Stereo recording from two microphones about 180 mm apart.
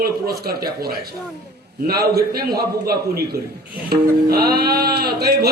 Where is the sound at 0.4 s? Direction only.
55° right (ahead or behind).